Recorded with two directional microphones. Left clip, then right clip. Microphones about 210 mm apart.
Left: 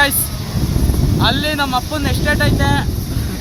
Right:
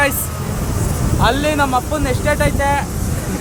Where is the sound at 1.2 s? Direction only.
10° left (ahead or behind).